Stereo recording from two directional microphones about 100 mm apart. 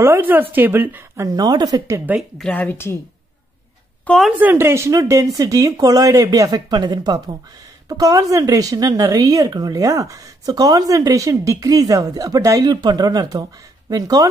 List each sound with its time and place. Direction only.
0.0 s a woman's voice: 20° right (ahead or behind)
1.2 s speech: 40° right (ahead or behind)
2.3 s a woman's voice: 10° left (ahead or behind)
4.3 s a woman's voice: 15° right (ahead or behind); by 14.3 s 40° right (ahead or behind)